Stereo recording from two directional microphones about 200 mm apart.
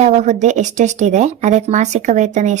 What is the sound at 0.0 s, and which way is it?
Speech, 35° right (ahead or behind).